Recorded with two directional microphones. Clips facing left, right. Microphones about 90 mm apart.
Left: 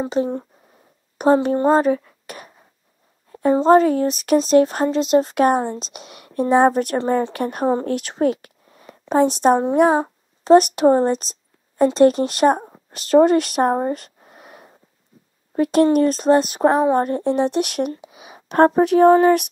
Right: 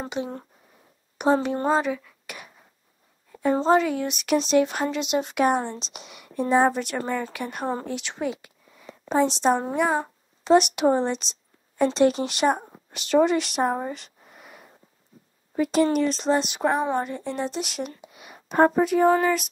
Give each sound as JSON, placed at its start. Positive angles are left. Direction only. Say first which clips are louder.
{"t": 0.2, "sound": "a woman's voice", "louder": "left 9 dB", "side_deg": 40}
{"t": 3.6, "sound": "speech", "louder": "left 8 dB", "side_deg": 45}
{"t": 10.4, "sound": "speech", "louder": "left 6 dB", "side_deg": 40}
{"t": 15.5, "sound": "speech", "louder": "left 6 dB", "side_deg": 55}